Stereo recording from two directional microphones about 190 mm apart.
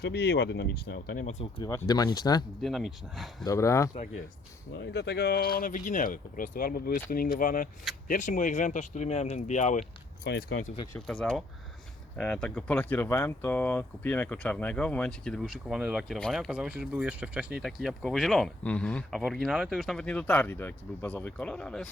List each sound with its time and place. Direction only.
0.0 s speech: 60° left (ahead or behind)
1.2 s speech: 35° left (ahead or behind)
1.9 s speech: 20° left (ahead or behind)
2.6 s speech: centre (ahead or behind)
3.4 s speech: 15° left (ahead or behind)
4.8 s speech: 60° left (ahead or behind); by 9.8 s 40° left (ahead or behind)
10.2 s speech: 60° left (ahead or behind)
10.9 s speech: 5° left (ahead or behind)